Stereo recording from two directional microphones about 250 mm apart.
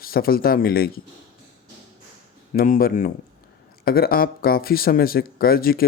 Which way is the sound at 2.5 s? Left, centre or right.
Left.